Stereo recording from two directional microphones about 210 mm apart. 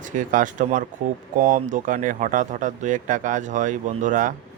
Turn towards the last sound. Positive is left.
turn(degrees=-35)  # may be behind; listen again after turning